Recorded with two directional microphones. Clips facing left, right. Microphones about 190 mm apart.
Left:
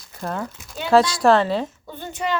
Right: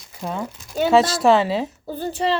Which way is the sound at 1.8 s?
35° right (ahead or behind).